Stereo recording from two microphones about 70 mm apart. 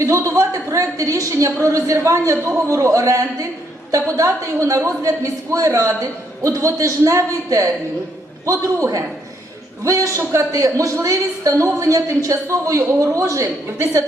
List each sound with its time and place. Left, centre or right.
0.0 s a woman's voice: right